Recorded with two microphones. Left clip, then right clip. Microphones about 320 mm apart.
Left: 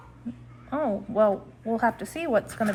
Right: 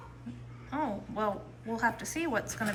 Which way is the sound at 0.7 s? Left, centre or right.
Centre.